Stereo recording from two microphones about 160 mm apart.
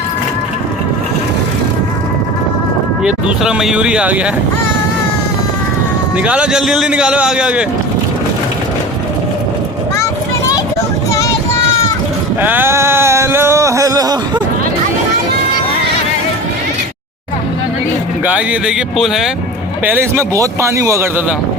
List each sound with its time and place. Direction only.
3.0 s a man's voice: 5° right (ahead or behind)
6.1 s a man's voice: 5° right (ahead or behind)
12.4 s a sound: 10° right (ahead or behind)
18.3 s a man's voice: 5° right (ahead or behind)
19.8 s speech: 15° right (ahead or behind)